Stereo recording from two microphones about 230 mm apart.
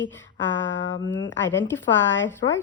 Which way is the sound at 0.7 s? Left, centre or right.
Left.